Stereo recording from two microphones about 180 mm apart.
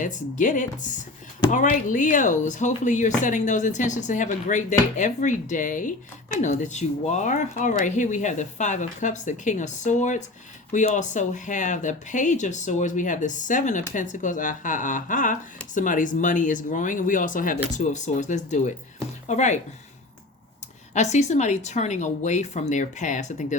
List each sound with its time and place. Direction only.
0.0 s speech: 45° left (ahead or behind)
20.9 s speech: 40° left (ahead or behind)